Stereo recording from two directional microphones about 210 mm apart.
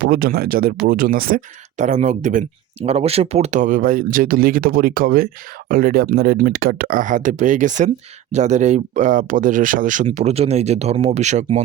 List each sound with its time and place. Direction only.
0.0 s speech: 45° right (ahead or behind)